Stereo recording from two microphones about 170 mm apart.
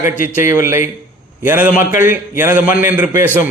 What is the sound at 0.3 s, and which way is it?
A man's voice, 15° right (ahead or behind).